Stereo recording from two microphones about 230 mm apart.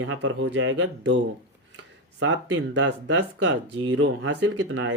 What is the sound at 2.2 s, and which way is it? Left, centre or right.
Speech, right.